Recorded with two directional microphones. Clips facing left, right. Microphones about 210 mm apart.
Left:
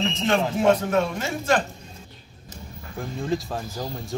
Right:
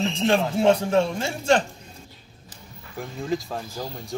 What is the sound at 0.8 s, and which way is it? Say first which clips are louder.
Speech: right 1 dB; 30° right (ahead or behind).